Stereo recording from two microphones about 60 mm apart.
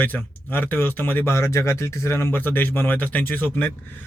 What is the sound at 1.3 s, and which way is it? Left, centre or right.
Speech, left.